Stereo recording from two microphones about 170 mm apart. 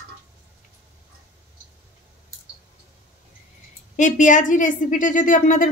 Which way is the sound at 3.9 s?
45° left (ahead or behind).